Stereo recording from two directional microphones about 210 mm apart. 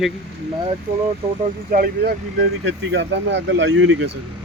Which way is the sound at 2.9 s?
60° right (ahead or behind).